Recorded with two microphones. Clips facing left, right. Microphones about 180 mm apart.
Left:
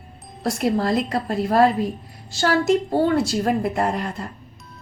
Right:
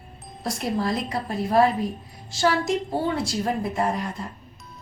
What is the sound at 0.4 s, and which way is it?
A woman's voice, 65° left (ahead or behind).